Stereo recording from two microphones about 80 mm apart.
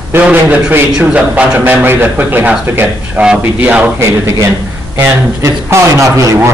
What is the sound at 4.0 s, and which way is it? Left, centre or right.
Speech, right.